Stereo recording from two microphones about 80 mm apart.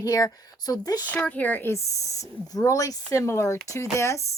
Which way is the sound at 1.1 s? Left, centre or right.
Left.